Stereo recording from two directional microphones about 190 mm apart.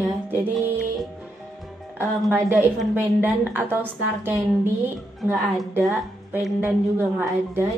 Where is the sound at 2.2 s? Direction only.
5° right (ahead or behind).